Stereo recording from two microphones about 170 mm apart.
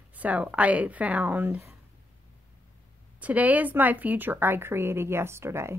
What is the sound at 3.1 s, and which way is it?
A woman's voice, 10° right (ahead or behind).